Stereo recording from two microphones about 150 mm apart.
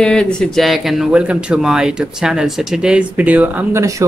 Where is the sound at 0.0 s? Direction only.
5° left (ahead or behind); by 3.8 s 10° right (ahead or behind).